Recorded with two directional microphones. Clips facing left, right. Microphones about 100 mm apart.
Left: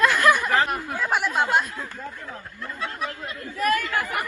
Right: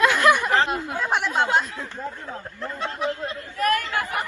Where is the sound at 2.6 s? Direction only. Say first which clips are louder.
Right 3 dB; 30° right (ahead or behind).